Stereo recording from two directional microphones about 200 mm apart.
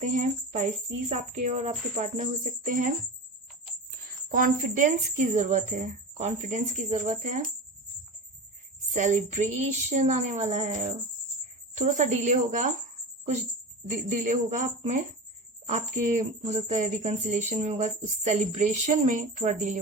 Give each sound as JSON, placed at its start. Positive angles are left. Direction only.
{"t": 0.0, "sound": "speech", "side_deg": -40}
{"t": 4.3, "sound": "speech", "side_deg": -45}
{"t": 8.9, "sound": "speech", "side_deg": -40}
{"t": 14.2, "sound": "speech", "side_deg": -40}